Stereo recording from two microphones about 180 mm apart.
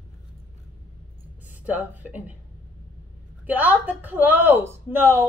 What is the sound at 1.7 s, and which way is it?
Speech, 10° right (ahead or behind).